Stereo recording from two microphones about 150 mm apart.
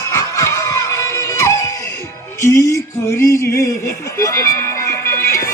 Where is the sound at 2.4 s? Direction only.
20° left (ahead or behind).